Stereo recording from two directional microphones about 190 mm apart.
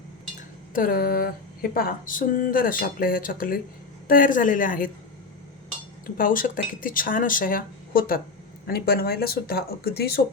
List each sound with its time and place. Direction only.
0.7 s speech: 50° left (ahead or behind)
6.1 s speech: 45° left (ahead or behind)